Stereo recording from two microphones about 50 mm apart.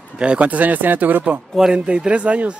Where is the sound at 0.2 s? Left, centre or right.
Right.